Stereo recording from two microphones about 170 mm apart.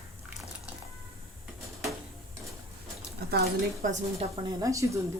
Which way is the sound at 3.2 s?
65° right (ahead or behind).